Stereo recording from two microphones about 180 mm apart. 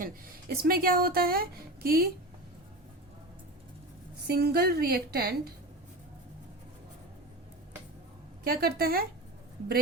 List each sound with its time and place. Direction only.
0.0 s a woman's voice: 55° right (ahead or behind)
4.3 s a woman's voice: 60° right (ahead or behind)
8.4 s a woman's voice: 55° right (ahead or behind)